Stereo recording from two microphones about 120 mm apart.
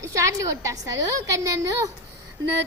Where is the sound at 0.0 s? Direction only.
25° right (ahead or behind).